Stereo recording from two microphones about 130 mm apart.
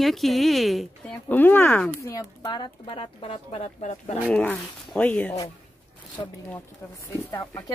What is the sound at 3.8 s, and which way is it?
Speech, 65° left (ahead or behind).